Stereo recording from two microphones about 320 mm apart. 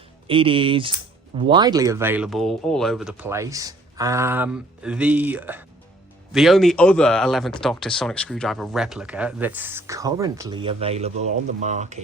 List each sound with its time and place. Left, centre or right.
0.3 s speech: centre